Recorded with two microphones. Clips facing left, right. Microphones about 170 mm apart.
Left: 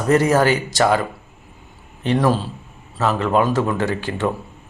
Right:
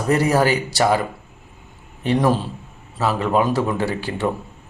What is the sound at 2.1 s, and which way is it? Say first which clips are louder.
Speech: even; 15° right (ahead or behind).